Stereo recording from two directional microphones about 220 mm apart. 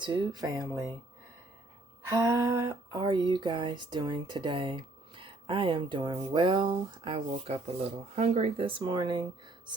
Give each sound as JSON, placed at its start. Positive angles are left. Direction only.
{"t": 0.0, "sound": "speech", "side_deg": -20}
{"t": 2.0, "sound": "speech", "side_deg": -15}